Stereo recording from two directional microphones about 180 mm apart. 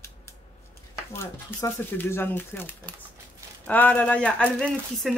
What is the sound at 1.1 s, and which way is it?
Speech, 15° left (ahead or behind).